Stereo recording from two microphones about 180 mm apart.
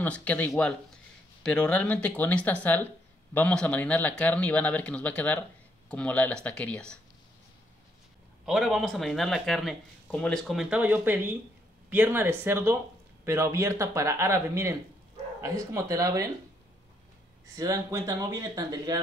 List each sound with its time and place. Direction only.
0.0 s speech: 5° left (ahead or behind)
8.5 s speech: centre (ahead or behind); by 16.3 s 20° right (ahead or behind)
17.6 s speech: 20° right (ahead or behind)